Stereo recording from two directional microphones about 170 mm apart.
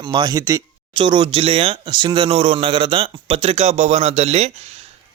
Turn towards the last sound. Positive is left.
turn(degrees=-40)  # may be behind; listen again after turning